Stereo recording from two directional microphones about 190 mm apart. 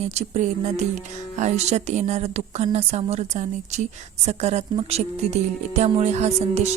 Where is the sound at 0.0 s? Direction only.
35° right (ahead or behind).